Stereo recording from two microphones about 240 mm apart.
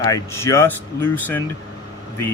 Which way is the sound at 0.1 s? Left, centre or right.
Centre.